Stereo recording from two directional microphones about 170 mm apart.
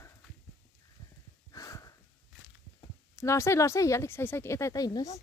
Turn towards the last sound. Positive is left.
turn(degrees=20)  # may be behind; listen again after turning